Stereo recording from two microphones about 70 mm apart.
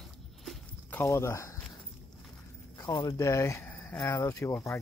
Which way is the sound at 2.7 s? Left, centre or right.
Left.